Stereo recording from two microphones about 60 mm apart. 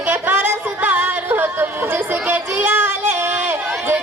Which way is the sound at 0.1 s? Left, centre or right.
Right.